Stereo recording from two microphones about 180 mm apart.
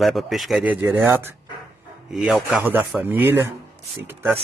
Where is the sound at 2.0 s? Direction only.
Centre (ahead or behind).